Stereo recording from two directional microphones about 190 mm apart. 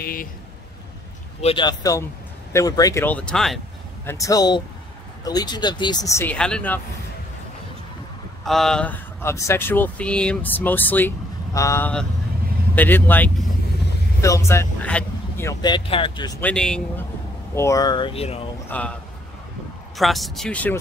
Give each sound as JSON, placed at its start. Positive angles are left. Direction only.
{"t": 0.0, "sound": "speech", "side_deg": 50}
{"t": 1.4, "sound": "speech", "side_deg": 25}
{"t": 4.0, "sound": "speech", "side_deg": 15}
{"t": 8.5, "sound": "speech", "side_deg": 0}
{"t": 16.3, "sound": "speech", "side_deg": 5}
{"t": 17.6, "sound": "speech", "side_deg": 15}
{"t": 18.7, "sound": "a man's voice", "side_deg": 5}
{"t": 20.0, "sound": "speech", "side_deg": 0}